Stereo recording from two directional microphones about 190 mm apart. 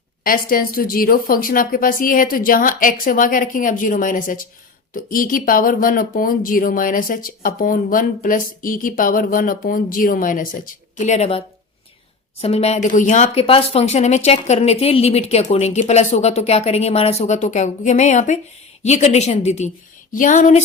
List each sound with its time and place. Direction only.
0.3 s speech: 50° left (ahead or behind)